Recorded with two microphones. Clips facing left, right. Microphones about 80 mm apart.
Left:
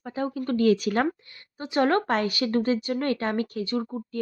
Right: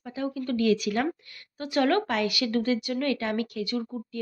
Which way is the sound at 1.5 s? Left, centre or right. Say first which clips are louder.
Left 1 dB; left.